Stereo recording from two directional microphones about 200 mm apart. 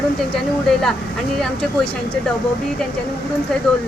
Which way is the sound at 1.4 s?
5° left (ahead or behind).